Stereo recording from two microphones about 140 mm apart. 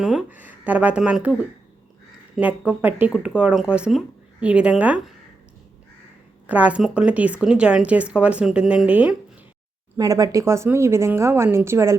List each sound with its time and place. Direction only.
0.0 s speech: 5° right (ahead or behind)
6.5 s speech: 10° right (ahead or behind)
10.0 s speech: 25° right (ahead or behind)